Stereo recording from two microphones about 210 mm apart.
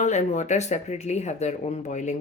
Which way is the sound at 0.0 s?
35° left (ahead or behind).